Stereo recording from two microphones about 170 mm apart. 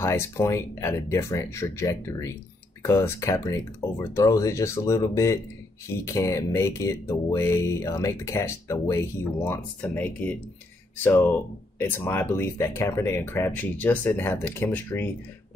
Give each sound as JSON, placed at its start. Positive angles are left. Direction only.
{"t": 0.0, "sound": "speech", "side_deg": 15}